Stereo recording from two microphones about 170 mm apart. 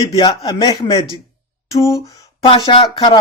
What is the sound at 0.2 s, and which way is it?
Speech, 25° left (ahead or behind).